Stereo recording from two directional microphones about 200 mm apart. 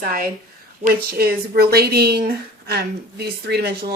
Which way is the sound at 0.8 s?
45° right (ahead or behind).